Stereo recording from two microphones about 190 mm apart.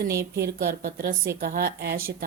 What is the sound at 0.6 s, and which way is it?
A woman's voice, 50° right (ahead or behind).